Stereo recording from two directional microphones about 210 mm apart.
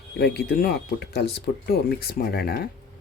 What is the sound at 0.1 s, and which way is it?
Speech, 50° left (ahead or behind).